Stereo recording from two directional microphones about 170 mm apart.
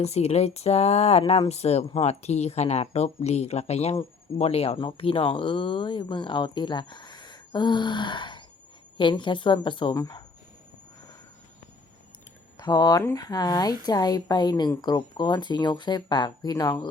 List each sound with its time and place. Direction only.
0.0 s speech: 40° left (ahead or behind); by 10.2 s 20° left (ahead or behind)
12.5 s speech: 25° left (ahead or behind)